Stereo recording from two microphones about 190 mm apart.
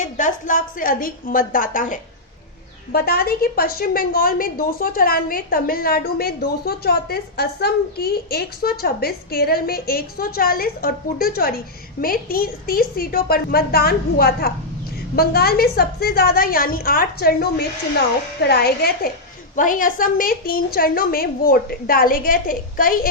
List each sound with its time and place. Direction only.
0.0 s a woman's voice: 40° left (ahead or behind)
19.5 s a woman's voice: 45° left (ahead or behind)